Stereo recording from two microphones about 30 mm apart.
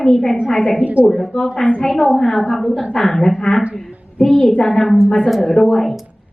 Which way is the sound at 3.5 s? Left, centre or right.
Left.